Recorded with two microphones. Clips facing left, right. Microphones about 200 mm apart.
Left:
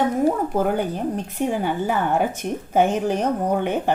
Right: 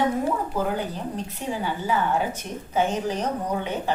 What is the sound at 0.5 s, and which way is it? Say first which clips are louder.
A woman's voice: left 5 dB; 55° left (ahead or behind).